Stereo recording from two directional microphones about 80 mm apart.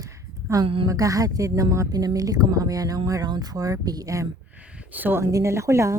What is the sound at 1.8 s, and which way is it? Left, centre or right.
Speech, right.